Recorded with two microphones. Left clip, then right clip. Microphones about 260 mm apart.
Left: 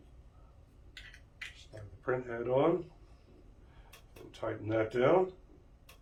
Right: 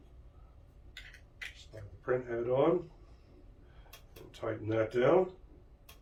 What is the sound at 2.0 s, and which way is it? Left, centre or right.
Speech, centre.